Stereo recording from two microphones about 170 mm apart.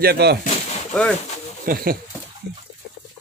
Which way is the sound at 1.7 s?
60° right (ahead or behind).